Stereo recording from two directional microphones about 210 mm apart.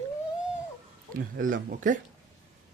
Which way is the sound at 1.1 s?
40° right (ahead or behind).